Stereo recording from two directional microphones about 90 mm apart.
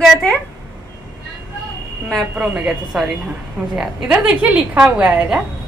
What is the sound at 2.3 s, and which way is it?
A woman's voice, 10° right (ahead or behind).